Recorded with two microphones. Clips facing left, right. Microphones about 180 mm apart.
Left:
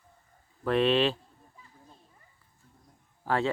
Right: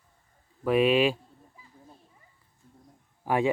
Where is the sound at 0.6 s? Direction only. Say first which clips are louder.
Right 2 dB; 10° right (ahead or behind).